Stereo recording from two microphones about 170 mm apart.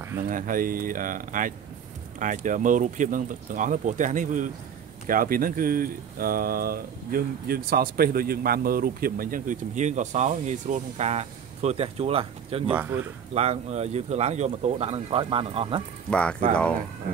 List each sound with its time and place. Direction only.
0.3 s speech: 50° right (ahead or behind); by 15.8 s 35° right (ahead or behind)
16.1 s speech: 5° left (ahead or behind)